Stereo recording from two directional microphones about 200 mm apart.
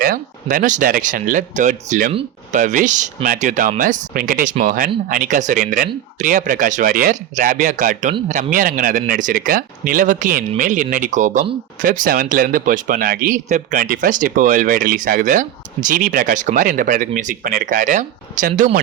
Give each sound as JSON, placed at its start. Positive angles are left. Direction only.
{"t": 0.0, "sound": "speech", "side_deg": -45}